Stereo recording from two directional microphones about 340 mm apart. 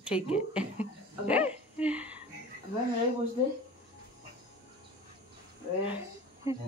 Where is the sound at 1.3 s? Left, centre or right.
Centre.